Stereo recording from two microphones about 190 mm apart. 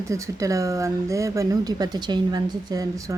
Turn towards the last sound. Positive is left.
turn(degrees=-15)  # may be behind; listen again after turning